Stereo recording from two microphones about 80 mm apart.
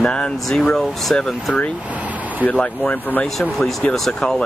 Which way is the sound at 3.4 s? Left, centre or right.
Centre.